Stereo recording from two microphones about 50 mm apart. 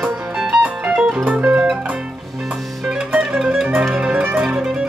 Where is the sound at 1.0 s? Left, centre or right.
Centre.